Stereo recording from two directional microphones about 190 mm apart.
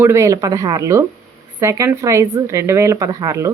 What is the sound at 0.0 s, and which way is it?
A woman's voice, 15° right (ahead or behind).